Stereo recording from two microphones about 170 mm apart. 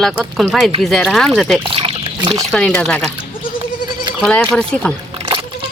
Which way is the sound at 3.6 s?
30° right (ahead or behind).